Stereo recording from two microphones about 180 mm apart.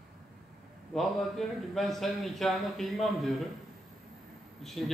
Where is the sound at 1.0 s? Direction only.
Centre (ahead or behind).